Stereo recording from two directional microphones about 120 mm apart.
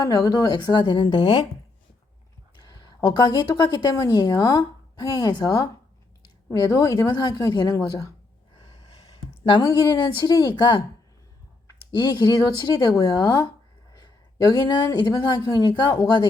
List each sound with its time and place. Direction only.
0.0 s a woman's voice: 30° left (ahead or behind); by 1.5 s 45° left (ahead or behind)
2.6 s a sound: 35° left (ahead or behind)
3.6 s a woman's voice: 40° left (ahead or behind)
9.6 s a woman's voice: 30° left (ahead or behind)
11.9 s a woman's voice: 40° left (ahead or behind)